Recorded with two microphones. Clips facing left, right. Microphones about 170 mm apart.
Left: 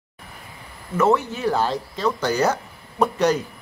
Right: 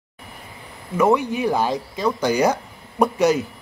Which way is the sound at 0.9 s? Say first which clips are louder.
Right 2 dB; 10° right (ahead or behind).